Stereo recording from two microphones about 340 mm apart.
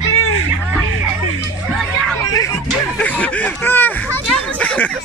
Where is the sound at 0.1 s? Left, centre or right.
Left.